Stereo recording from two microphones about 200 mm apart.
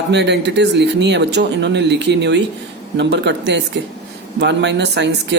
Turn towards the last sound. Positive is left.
turn(degrees=-60)  # may be behind; listen again after turning